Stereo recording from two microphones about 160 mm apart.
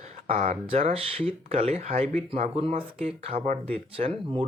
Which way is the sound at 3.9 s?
35° right (ahead or behind).